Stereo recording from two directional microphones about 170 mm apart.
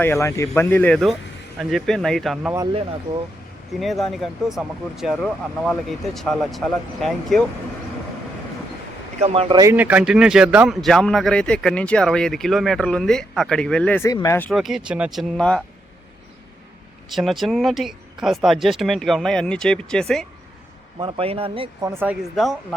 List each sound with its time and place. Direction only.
0.0 s a man's voice: 15° left (ahead or behind); by 2.5 s centre (ahead or behind)
3.1 s speech: 15° right (ahead or behind)
3.7 s a man's voice: centre (ahead or behind)
9.2 s a man's voice: 35° right (ahead or behind)
9.6 s a man's voice: 10° right (ahead or behind); by 14.1 s 10° left (ahead or behind)
14.1 s speech: 20° left (ahead or behind)
14.5 s a man's voice: centre (ahead or behind)
17.2 s a man's voice: centre (ahead or behind)
21.0 s a man's voice: 35° right (ahead or behind)
21.8 s speech: 15° right (ahead or behind)